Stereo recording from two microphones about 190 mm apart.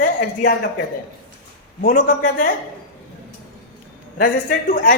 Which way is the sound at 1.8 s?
45° left (ahead or behind).